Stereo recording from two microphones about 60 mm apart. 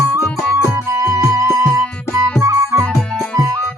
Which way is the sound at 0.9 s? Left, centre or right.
Centre.